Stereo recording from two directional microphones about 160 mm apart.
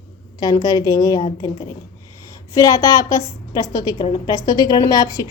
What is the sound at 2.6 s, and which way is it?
A woman's voice, 20° left (ahead or behind).